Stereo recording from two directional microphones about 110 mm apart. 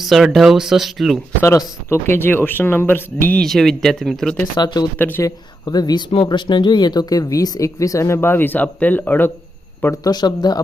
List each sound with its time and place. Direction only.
0.0 s speech: centre (ahead or behind)
1.4 s speech: 25° left (ahead or behind)
3.4 s speech: 5° left (ahead or behind)
4.5 s speech: 40° left (ahead or behind)
4.9 s speech: 15° left (ahead or behind)
5.2 s speech: 35° left (ahead or behind); by 9.3 s 20° left (ahead or behind)
9.8 s speech: 30° left (ahead or behind)